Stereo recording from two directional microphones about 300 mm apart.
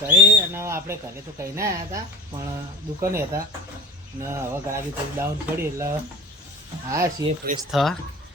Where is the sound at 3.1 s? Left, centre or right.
Centre.